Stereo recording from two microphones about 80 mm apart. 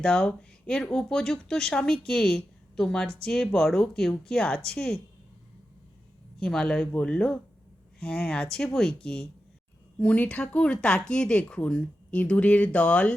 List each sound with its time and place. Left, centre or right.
0.0 s speech: centre
6.4 s speech: centre